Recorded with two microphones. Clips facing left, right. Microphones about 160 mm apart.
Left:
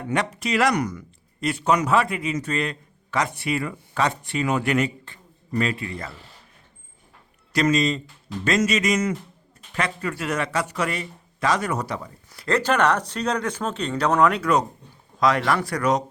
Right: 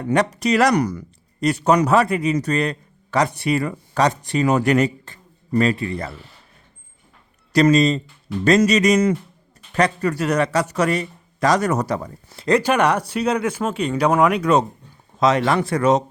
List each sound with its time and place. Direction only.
0.0 s speech: 40° right (ahead or behind)
7.5 s speech: 35° right (ahead or behind)
12.3 s speech: 25° right (ahead or behind)
12.5 s speech: 10° right (ahead or behind)